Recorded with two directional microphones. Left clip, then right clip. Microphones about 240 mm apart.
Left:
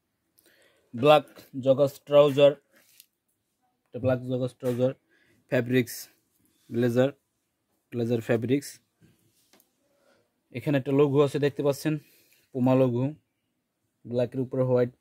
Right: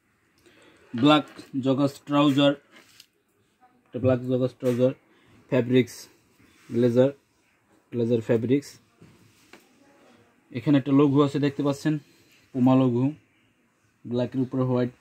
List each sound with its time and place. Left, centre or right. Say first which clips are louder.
1.0 s speech: left 1 dB; left
3.9 s speech: right 3 dB; left
10.5 s speech: right 4 dB; left